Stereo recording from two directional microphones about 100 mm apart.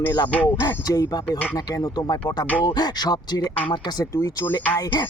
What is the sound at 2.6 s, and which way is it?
Speech, 45° left (ahead or behind).